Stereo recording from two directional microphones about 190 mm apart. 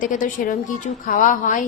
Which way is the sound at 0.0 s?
45° left (ahead or behind).